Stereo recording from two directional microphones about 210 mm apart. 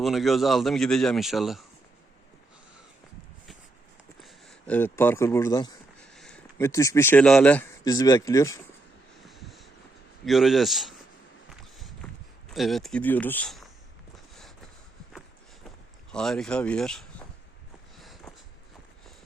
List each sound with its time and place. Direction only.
0.0 s a man's voice: centre (ahead or behind)
4.2 s speech: centre (ahead or behind); by 5.7 s 15° left (ahead or behind)
6.0 s speech: 5° left (ahead or behind)
7.9 s speech: 15° left (ahead or behind)
9.2 s a sound: centre (ahead or behind)
10.2 s a man's voice: centre (ahead or behind)
12.5 s a man's voice: centre (ahead or behind)
16.1 s a man's voice: centre (ahead or behind)
17.9 s a sound: centre (ahead or behind)